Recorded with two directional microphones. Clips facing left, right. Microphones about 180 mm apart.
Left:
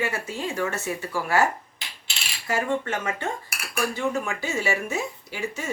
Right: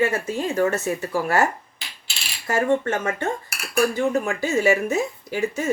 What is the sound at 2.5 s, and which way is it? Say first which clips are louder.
Speech: right 5 dB; 50° right (ahead or behind).